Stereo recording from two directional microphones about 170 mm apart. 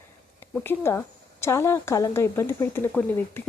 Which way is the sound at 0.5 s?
15° left (ahead or behind).